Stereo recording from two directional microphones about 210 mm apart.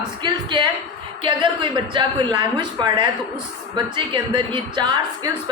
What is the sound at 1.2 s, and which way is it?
Speech, 25° right (ahead or behind).